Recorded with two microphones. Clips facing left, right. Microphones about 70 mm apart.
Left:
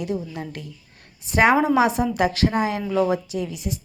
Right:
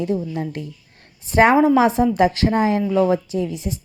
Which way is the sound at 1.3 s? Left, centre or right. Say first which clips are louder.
Right 4 dB; right.